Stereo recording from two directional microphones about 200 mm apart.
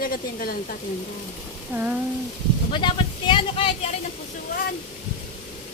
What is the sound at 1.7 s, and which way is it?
Speech, 10° right (ahead or behind).